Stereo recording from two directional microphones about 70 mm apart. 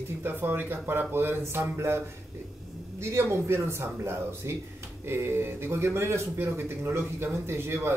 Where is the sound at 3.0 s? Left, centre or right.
Right.